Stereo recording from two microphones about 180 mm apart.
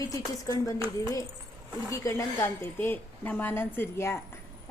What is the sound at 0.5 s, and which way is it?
Speech, 25° right (ahead or behind).